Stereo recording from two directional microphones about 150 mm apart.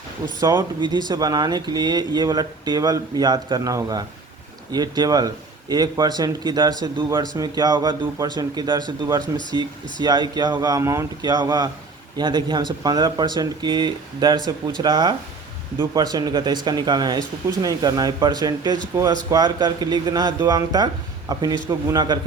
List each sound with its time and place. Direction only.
0.4 s speech: 30° right (ahead or behind)